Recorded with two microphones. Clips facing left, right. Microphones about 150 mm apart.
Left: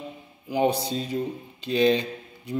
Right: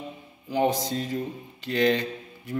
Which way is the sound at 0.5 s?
10° left (ahead or behind).